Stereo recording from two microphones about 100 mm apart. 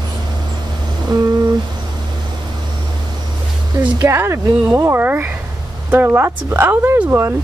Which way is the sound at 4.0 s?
30° right (ahead or behind).